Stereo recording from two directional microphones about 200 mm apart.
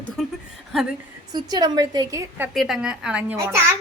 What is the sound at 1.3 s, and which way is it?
A woman's voice, 20° right (ahead or behind).